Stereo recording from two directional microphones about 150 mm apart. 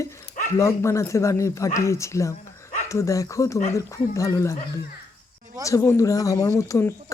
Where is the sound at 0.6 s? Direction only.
20° left (ahead or behind).